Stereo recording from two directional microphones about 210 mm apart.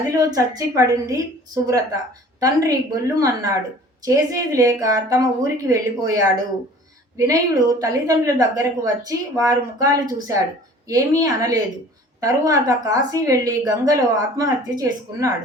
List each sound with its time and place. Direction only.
0.0 s a woman's voice: 15° right (ahead or behind)